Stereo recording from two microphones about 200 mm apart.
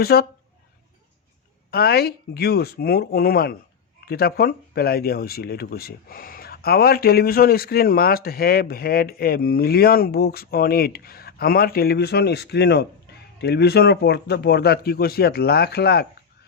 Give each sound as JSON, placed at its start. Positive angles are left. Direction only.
{"t": 0.0, "sound": "speech", "side_deg": 50}
{"t": 1.7, "sound": "speech", "side_deg": 50}